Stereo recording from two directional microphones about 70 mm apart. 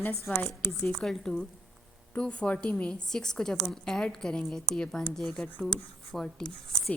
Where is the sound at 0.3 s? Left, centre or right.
Left.